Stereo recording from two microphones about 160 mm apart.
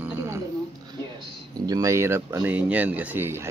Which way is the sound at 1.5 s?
25° right (ahead or behind).